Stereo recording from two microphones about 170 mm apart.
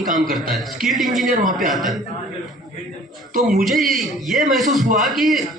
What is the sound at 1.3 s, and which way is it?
Speech, 55° right (ahead or behind).